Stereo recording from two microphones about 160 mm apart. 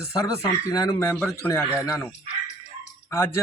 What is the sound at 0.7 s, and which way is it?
Speech, 20° left (ahead or behind).